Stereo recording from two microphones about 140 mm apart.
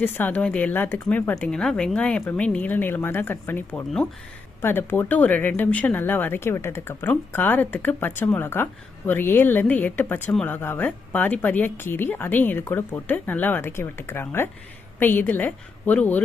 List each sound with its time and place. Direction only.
0.0 s speech: 10° left (ahead or behind)